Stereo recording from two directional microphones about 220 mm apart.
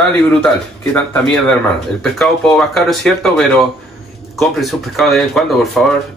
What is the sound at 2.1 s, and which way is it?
Speech, centre (ahead or behind).